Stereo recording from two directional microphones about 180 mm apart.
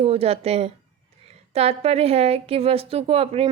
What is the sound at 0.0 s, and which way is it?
Speech, 35° right (ahead or behind).